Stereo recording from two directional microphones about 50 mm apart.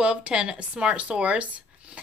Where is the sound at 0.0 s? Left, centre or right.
Right.